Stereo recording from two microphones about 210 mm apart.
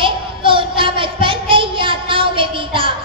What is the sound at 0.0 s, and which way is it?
Child singing, 25° right (ahead or behind).